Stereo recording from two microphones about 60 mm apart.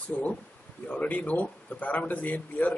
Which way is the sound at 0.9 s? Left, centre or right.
Left.